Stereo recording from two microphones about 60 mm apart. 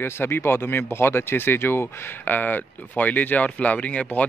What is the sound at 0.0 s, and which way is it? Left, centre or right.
Speech, left.